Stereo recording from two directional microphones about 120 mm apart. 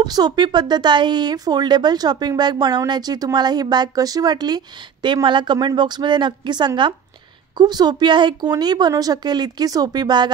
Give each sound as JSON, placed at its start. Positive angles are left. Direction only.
{"t": 0.0, "sound": "speech", "side_deg": -35}